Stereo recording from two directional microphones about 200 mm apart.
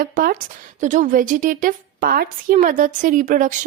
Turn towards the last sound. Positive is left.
turn(degrees=-40)  # may be behind; listen again after turning